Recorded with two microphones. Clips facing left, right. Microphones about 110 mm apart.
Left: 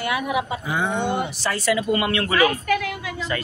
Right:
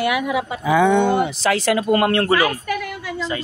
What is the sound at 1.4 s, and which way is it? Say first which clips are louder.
Speech: right 4 dB; 90° right.